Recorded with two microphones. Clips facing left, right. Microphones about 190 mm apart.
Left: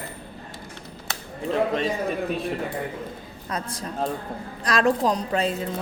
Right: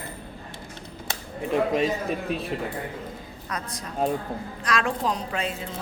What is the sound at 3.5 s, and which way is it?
A woman's voice, 30° left (ahead or behind).